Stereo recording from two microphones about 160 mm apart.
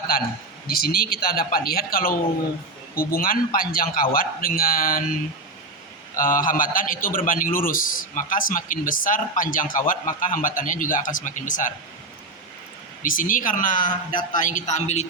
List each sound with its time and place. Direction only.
0.7 s a man's voice: 70° left (ahead or behind)
6.1 s a man's voice: 60° left (ahead or behind)
13.0 s a man's voice: 60° left (ahead or behind)